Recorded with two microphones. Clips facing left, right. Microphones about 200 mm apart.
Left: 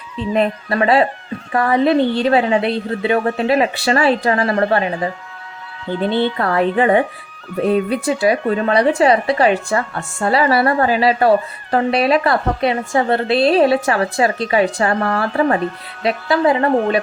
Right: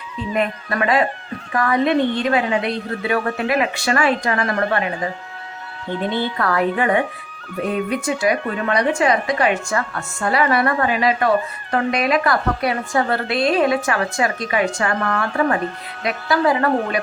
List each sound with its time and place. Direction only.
0.3 s a woman's voice: 30° left (ahead or behind)
6.0 s a woman's voice: 30° left (ahead or behind)